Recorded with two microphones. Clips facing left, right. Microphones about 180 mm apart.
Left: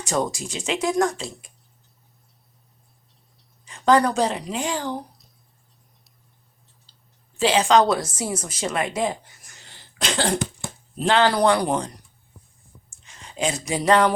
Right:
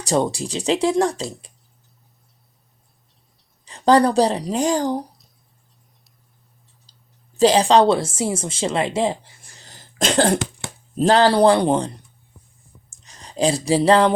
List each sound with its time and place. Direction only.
0.0 s speech: 35° right (ahead or behind)
3.7 s speech: 35° right (ahead or behind)
6.9 s clicking: 40° right (ahead or behind)
7.3 s speech: 40° right (ahead or behind)
10.3 s cough: 90° right
10.9 s speech: 40° right (ahead or behind)
12.9 s a sound: 40° right (ahead or behind)